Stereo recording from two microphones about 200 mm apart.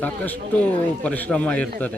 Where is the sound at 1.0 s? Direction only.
5° left (ahead or behind).